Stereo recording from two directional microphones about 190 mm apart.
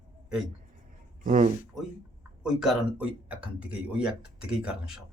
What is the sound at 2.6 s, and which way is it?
Speech, 5° right (ahead or behind).